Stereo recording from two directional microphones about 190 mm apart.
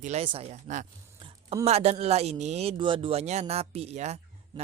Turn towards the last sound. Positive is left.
turn(degrees=-35)  # may be behind; listen again after turning